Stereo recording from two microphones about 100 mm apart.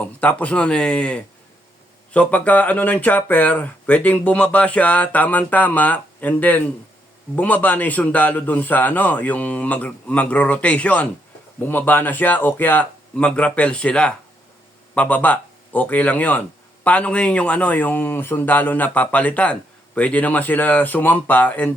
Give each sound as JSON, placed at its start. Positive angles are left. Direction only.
{"t": 0.0, "sound": "speech", "side_deg": 15}